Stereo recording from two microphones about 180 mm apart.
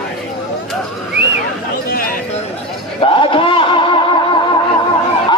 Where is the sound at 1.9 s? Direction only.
55° left (ahead or behind).